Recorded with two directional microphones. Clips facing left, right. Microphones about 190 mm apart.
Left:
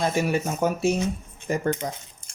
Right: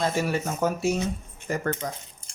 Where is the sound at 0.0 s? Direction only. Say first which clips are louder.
Left 2 dB; 15° left (ahead or behind).